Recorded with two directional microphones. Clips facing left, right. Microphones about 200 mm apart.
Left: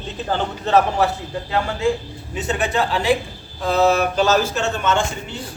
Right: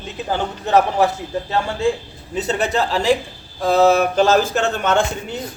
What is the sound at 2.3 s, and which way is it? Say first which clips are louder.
A man's voice: right 2 dB; 40° right (ahead or behind).